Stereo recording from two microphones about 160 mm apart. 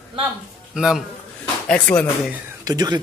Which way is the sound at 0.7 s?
Centre (ahead or behind).